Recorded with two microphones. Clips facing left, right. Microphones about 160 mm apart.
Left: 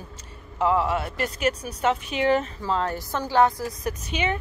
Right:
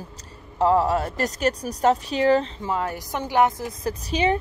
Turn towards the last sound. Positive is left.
turn(degrees=-35)  # may be behind; listen again after turning